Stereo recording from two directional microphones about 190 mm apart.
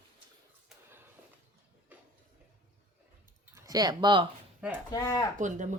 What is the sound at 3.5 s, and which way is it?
Speech, 20° right (ahead or behind).